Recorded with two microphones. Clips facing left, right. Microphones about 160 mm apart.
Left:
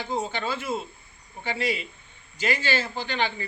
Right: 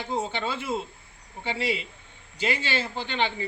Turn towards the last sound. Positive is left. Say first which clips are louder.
# even
turn(degrees=-25)  # may be behind; listen again after turning